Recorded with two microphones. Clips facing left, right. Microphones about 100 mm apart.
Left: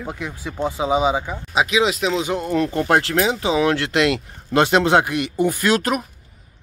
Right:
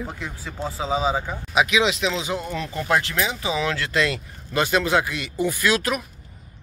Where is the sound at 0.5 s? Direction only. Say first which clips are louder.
Left 5 dB; 20° left (ahead or behind).